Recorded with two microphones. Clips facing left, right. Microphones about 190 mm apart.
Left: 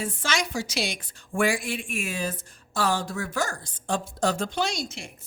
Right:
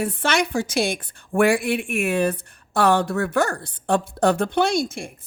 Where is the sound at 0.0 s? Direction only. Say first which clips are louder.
Right 7 dB; 60° right (ahead or behind).